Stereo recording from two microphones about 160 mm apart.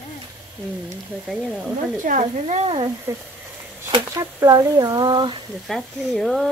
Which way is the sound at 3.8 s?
25° right (ahead or behind).